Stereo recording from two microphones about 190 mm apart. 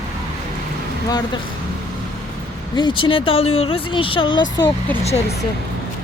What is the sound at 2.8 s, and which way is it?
Speech, 25° left (ahead or behind).